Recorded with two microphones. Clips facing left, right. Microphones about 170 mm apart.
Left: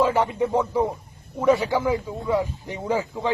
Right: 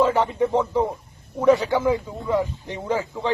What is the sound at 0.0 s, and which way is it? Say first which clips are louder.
A man's voice: right 1 dB; 10° left (ahead or behind).